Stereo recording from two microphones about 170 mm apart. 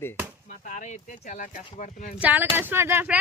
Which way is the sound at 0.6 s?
45° left (ahead or behind).